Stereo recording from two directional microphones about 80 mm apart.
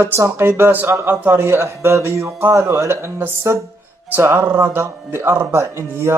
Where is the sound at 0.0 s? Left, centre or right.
Right.